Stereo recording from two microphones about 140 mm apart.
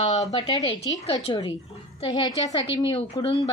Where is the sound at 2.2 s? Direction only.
30° left (ahead or behind).